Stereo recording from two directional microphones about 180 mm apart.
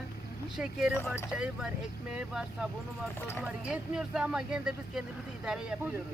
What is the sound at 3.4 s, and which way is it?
Speech, 5° right (ahead or behind).